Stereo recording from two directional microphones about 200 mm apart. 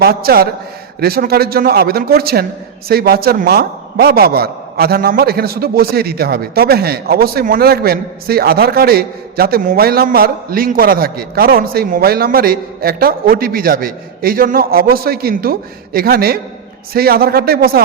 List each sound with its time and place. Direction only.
0.0 s a man's voice: 50° right (ahead or behind)